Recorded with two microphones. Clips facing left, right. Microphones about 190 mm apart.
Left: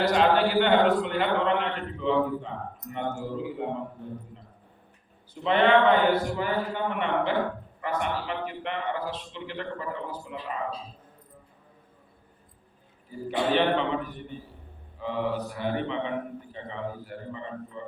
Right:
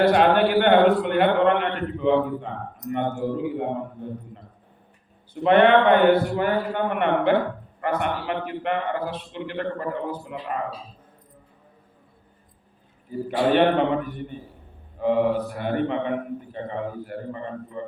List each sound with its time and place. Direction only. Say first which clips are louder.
0.0 s a man's voice: right 4 dB; 60° right (ahead or behind)
5.3 s a man's voice: right 5 dB; 60° right (ahead or behind)
13.5 s a man's voice: right 5 dB; 55° right (ahead or behind)
14.9 s a man's voice: right 8 dB; 55° right (ahead or behind)